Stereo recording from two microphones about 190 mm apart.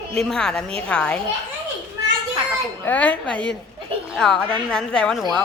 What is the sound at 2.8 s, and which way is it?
Speech, 10° left (ahead or behind).